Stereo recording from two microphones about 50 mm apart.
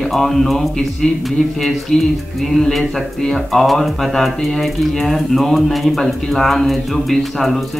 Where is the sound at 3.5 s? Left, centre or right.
Centre.